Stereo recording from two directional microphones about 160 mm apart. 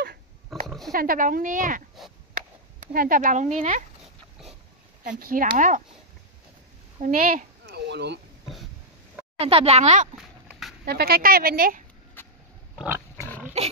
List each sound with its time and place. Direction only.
0.7 s oink: centre (ahead or behind)
0.9 s speech: 60° right (ahead or behind)
2.0 s a sound: centre (ahead or behind)
2.9 s speech: 60° right (ahead or behind)
5.2 s speech: 60° right (ahead or behind)
7.0 s a woman's voice: 55° right (ahead or behind); by 8.2 s 90° right
9.4 s speech: 35° right (ahead or behind)
10.9 s a woman's voice: 75° right (ahead or behind)
12.2 s a sound: 15° left (ahead or behind)
13.6 s pig: 40° right (ahead or behind)